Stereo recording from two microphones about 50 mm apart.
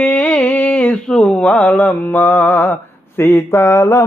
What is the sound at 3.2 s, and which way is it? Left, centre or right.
Mantra, left.